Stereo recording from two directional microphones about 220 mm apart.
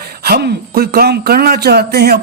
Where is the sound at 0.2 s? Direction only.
45° right (ahead or behind).